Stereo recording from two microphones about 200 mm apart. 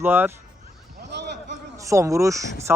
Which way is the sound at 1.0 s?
60° right (ahead or behind).